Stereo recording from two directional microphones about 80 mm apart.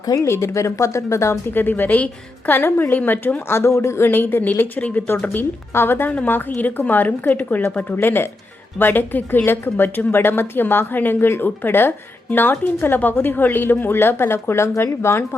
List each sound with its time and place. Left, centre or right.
0.0 s speech: left
0.3 s a woman's voice: left